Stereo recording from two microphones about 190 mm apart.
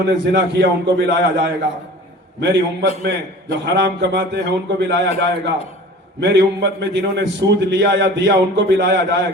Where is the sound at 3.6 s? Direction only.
65° right (ahead or behind).